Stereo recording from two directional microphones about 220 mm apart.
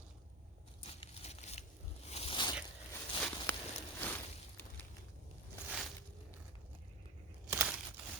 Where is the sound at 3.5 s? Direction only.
10° left (ahead or behind).